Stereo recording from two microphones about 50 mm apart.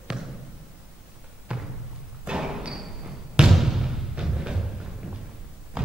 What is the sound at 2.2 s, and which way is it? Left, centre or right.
Thump, centre.